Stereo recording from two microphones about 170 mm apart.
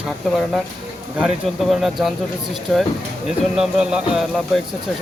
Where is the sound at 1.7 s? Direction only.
Centre (ahead or behind).